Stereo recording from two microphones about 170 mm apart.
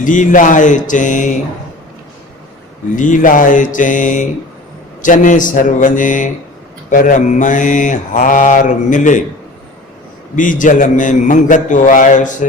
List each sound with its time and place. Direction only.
0.0 s mantra: 50° left (ahead or behind)
2.9 s mantra: 50° left (ahead or behind)
10.3 s mantra: 50° left (ahead or behind)